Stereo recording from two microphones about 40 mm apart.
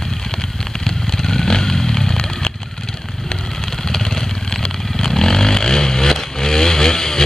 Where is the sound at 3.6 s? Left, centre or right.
Centre.